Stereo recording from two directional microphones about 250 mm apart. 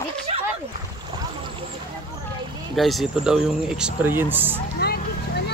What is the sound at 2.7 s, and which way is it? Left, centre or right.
Speech, centre.